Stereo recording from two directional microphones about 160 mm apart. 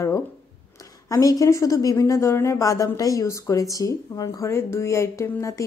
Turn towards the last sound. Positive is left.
turn(degrees=20)  # may be behind; listen again after turning